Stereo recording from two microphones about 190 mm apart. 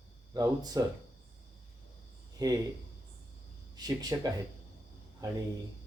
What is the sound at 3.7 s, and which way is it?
Speech, 20° right (ahead or behind).